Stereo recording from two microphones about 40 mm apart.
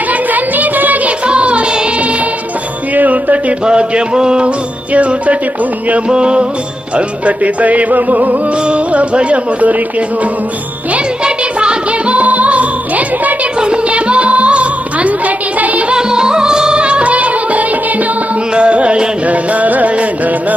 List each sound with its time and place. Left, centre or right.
0.1 s a sound: right
1.3 s music: right
2.9 s music: right
3.7 s mantra: right
4.9 s music: right
6.1 s mantra: right
6.9 s music: right
8.6 s music: right
11.2 s music: right
12.1 s music: right
13.6 s music: right
15.9 s music: centre; by 20.1 s right